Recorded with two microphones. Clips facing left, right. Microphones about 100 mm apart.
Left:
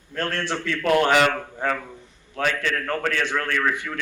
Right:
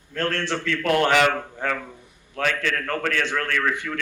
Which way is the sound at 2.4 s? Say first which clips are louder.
Even; 25° left (ahead or behind).